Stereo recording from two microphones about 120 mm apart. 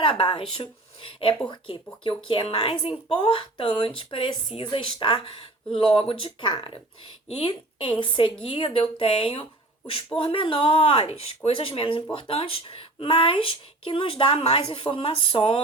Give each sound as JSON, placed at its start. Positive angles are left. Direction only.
{"t": 0.0, "sound": "speech", "side_deg": 45}
{"t": 7.3, "sound": "speech", "side_deg": 60}